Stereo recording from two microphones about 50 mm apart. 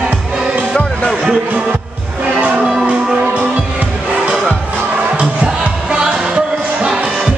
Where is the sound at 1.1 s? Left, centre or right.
Centre.